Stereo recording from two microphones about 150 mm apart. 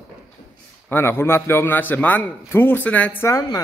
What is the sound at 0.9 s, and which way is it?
A man's voice, 15° left (ahead or behind).